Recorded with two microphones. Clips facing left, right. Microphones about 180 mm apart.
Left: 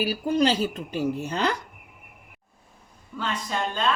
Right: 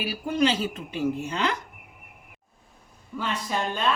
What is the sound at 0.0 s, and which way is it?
A woman's voice, 40° left (ahead or behind).